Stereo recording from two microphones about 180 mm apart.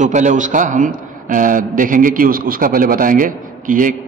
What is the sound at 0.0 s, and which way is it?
A man's voice, 40° right (ahead or behind).